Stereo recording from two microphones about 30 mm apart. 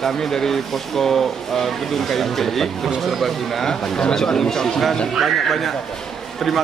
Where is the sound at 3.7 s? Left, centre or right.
Left.